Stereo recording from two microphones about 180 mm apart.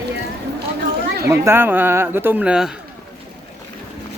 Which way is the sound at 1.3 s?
15° right (ahead or behind).